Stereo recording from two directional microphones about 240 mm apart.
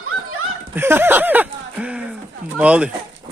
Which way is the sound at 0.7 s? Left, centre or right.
Centre.